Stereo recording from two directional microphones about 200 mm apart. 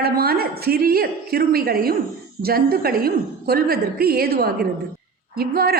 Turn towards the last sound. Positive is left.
turn(degrees=-50)  # may be behind; listen again after turning